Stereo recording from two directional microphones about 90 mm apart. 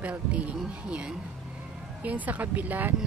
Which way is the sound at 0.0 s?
15° right (ahead or behind).